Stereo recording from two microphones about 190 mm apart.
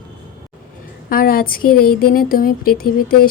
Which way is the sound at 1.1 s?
50° left (ahead or behind).